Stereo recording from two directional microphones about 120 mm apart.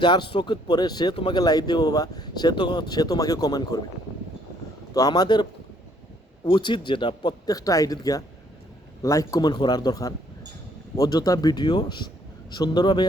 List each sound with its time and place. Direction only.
0.0 s speech: 40° left (ahead or behind)
4.9 s speech: 35° left (ahead or behind)